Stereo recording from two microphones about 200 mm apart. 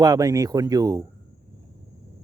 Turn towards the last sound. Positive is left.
turn(degrees=-15)  # may be behind; listen again after turning